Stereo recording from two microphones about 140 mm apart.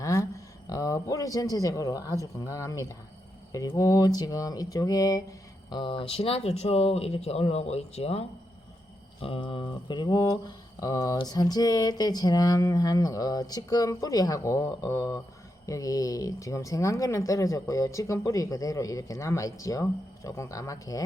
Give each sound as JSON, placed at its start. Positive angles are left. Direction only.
{"t": 0.0, "sound": "a sound", "side_deg": 25}
{"t": 3.5, "sound": "mantra", "side_deg": 25}
{"t": 5.7, "sound": "speech", "side_deg": 40}
{"t": 9.2, "sound": "mantra", "side_deg": 40}